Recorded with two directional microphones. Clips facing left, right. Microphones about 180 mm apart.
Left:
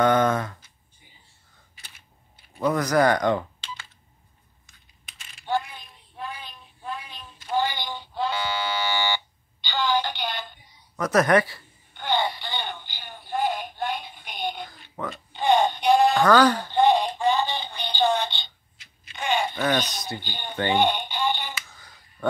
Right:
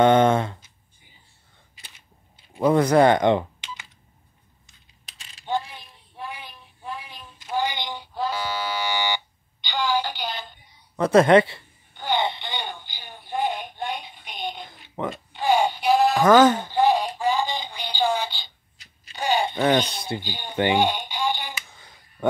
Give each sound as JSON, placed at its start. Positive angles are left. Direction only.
{"t": 0.0, "sound": "speech", "side_deg": -25}
{"t": 2.6, "sound": "speech", "side_deg": -25}
{"t": 6.1, "sound": "child singing", "side_deg": -15}
{"t": 7.4, "sound": "buzzer", "side_deg": -15}
{"t": 11.0, "sound": "speech", "side_deg": -25}
{"t": 12.0, "sound": "telephone", "side_deg": -15}
{"t": 12.3, "sound": "a sound", "side_deg": -20}
{"t": 14.7, "sound": "a sound", "side_deg": -20}
{"t": 15.3, "sound": "a sound", "side_deg": -5}
{"t": 16.3, "sound": "speech", "side_deg": -20}
{"t": 16.6, "sound": "synthetic singing", "side_deg": -5}
{"t": 18.8, "sound": "a sound", "side_deg": -35}
{"t": 19.5, "sound": "speech", "side_deg": -25}
{"t": 20.2, "sound": "music", "side_deg": -10}